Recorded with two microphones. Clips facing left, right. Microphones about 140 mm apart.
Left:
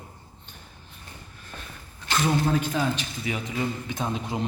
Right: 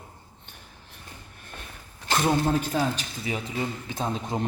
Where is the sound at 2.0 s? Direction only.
45° right (ahead or behind).